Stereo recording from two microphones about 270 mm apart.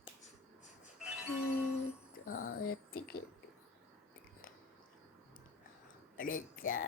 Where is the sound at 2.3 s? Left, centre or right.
Left.